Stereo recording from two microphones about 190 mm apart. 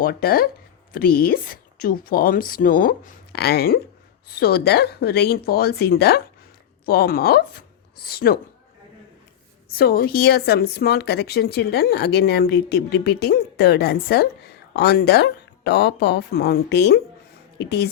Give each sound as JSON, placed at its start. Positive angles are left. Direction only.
{"t": 0.0, "sound": "a woman's voice", "side_deg": 50}
{"t": 9.7, "sound": "a woman's voice", "side_deg": 55}